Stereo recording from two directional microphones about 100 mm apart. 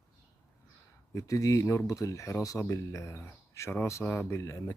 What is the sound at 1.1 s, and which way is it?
Speech, 35° left (ahead or behind).